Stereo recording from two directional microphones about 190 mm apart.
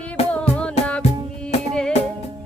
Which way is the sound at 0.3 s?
5° left (ahead or behind).